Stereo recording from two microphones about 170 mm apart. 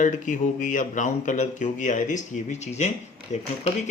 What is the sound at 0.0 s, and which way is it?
Speech, 50° left (ahead or behind).